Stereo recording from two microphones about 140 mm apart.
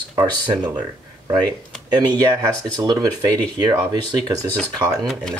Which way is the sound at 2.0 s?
25° right (ahead or behind).